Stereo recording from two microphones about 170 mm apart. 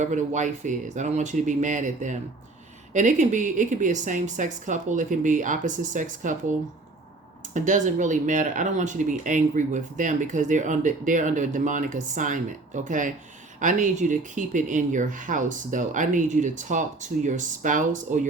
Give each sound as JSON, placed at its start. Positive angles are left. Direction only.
{"t": 0.0, "sound": "speech", "side_deg": -45}
{"t": 7.5, "sound": "speech", "side_deg": -50}